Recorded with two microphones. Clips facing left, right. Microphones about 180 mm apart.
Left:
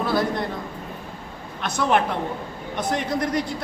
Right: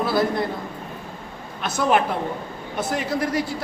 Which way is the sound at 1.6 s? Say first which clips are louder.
Right 1 dB; 5° right (ahead or behind).